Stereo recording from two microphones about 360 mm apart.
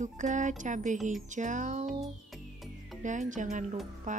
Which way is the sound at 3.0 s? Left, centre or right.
Right.